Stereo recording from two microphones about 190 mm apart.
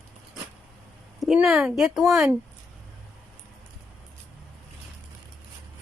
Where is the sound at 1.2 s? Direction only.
5° right (ahead or behind).